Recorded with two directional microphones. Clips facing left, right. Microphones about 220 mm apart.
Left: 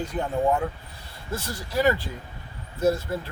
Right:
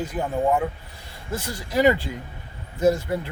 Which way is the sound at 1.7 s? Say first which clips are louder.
Right 4 dB; 15° right (ahead or behind).